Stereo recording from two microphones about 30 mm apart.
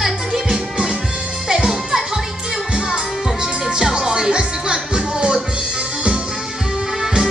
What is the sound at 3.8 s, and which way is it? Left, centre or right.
Music, centre.